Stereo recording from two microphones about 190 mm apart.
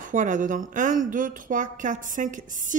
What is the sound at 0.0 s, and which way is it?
A woman's voice, 40° right (ahead or behind).